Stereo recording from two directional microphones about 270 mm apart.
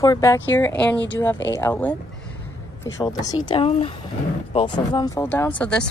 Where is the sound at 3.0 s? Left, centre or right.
Centre.